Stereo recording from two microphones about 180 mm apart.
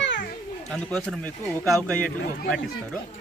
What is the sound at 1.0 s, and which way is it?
A man's voice, 5° left (ahead or behind).